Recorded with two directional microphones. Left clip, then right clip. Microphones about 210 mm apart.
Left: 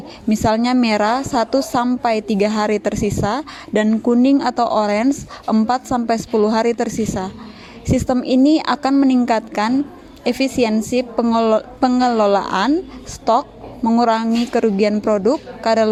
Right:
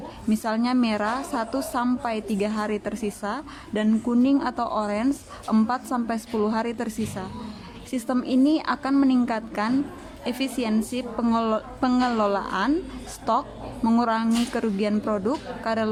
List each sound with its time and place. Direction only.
0.3 s a woman's voice: 25° left (ahead or behind)
5.0 s speech: 10° left (ahead or behind)
5.6 s a woman's voice: 25° left (ahead or behind)